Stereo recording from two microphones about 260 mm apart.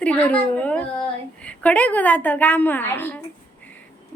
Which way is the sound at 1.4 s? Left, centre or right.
Centre.